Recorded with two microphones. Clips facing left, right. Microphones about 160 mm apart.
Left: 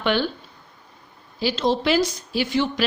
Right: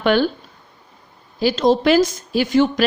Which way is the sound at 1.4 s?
45° right (ahead or behind).